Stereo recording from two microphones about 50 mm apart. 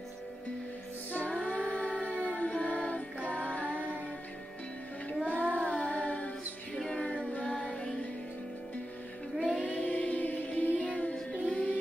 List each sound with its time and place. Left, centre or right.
1.1 s music: left
5.2 s child singing: left
5.7 s music: left
9.7 s music: left
11.1 s child singing: left